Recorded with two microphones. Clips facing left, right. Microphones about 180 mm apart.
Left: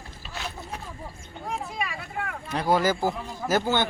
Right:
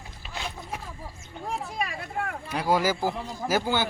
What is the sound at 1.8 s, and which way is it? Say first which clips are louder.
Vehicle: right 1 dB; 45° right (ahead or behind).